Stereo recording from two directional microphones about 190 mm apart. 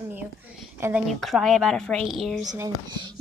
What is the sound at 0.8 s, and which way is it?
A woman's voice, 10° right (ahead or behind).